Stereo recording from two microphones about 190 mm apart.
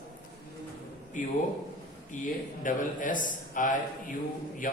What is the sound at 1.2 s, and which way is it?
A man's voice, 45° left (ahead or behind).